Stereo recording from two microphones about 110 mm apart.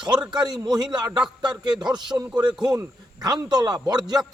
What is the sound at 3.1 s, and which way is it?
A man's voice, 40° right (ahead or behind).